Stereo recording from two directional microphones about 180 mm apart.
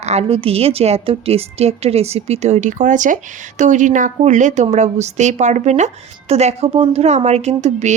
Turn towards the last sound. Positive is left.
turn(degrees=-40)  # may be behind; listen again after turning